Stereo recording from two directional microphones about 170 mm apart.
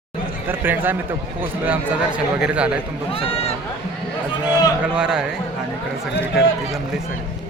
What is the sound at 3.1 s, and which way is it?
Speech, 35° left (ahead or behind).